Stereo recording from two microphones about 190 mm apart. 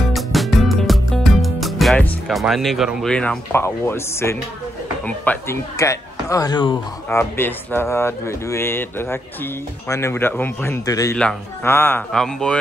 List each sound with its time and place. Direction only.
0.1 s music: centre (ahead or behind)
5.0 s speech: 10° left (ahead or behind)